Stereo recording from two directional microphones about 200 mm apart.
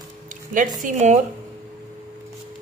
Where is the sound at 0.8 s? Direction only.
35° right (ahead or behind).